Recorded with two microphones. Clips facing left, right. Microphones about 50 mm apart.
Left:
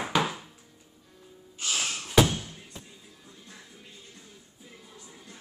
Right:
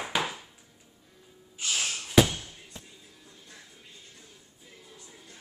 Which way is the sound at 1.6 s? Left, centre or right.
Centre.